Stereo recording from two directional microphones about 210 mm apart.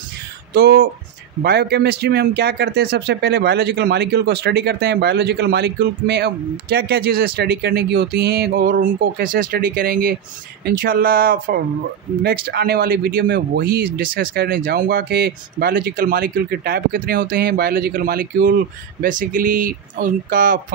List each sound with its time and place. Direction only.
0.6 s speech: 45° right (ahead or behind)